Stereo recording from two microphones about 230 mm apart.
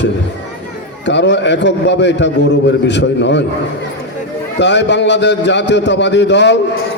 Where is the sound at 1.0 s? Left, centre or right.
Left.